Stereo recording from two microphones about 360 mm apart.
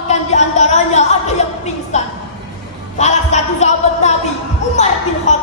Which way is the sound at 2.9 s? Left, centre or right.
Centre.